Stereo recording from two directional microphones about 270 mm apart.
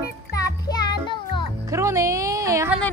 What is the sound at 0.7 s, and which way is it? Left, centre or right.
Music, centre.